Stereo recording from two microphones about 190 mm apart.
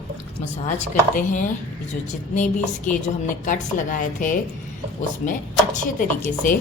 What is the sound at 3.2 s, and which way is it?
A woman's voice, 40° left (ahead or behind).